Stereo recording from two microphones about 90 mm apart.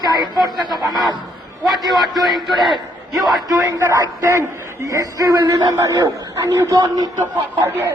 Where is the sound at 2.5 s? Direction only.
55° right (ahead or behind).